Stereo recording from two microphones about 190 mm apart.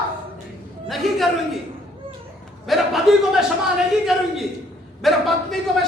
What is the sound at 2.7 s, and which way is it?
Speech, centre (ahead or behind).